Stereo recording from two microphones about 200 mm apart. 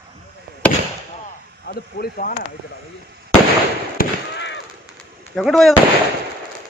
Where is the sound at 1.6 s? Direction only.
50° left (ahead or behind).